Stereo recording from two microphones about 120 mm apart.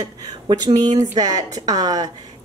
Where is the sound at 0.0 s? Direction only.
40° right (ahead or behind).